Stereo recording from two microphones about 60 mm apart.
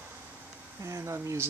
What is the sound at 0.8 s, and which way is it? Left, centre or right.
Speech, right.